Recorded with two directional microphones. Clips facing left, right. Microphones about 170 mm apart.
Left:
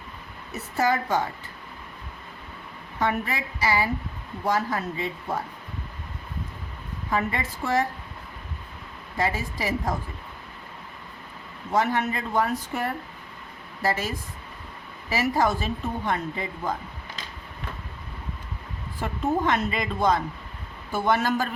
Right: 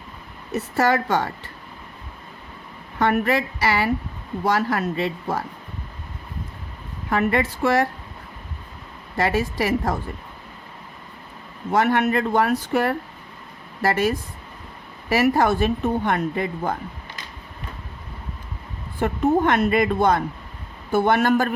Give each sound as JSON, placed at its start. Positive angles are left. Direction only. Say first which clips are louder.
{"t": 0.5, "sound": "speech", "louder": "right 4 dB", "side_deg": -75}
{"t": 3.0, "sound": "speech", "louder": "right 7 dB", "side_deg": -70}
{"t": 7.1, "sound": "speech", "louder": "right 6 dB", "side_deg": -65}
{"t": 9.1, "sound": "speech", "louder": "right 6 dB", "side_deg": -70}
{"t": 11.7, "sound": "speech", "louder": "right 5 dB", "side_deg": -70}
{"t": 13.8, "sound": "speech", "louder": "right 6 dB", "side_deg": -65}
{"t": 15.1, "sound": "speech", "louder": "right 5 dB", "side_deg": -65}
{"t": 18.9, "sound": "speech", "louder": "right 6 dB", "side_deg": -60}